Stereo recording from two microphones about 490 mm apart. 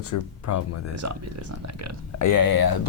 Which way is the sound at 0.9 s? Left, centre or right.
Right.